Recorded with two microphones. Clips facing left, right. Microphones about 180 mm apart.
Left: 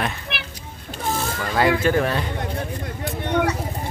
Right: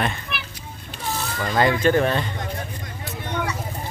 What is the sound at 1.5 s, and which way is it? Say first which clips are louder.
Speech: even; 5° left (ahead or behind).